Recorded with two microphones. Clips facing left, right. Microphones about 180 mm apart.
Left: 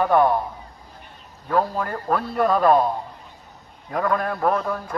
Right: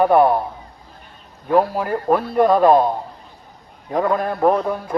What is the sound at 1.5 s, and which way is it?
Speech, 10° right (ahead or behind).